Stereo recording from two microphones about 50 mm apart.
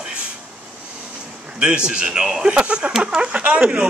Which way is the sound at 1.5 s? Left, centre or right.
Centre.